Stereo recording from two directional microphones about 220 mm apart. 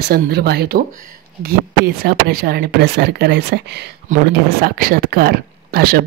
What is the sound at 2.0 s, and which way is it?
Speech, 45° right (ahead or behind).